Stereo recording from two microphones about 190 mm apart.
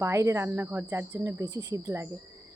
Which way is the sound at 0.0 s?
15° right (ahead or behind).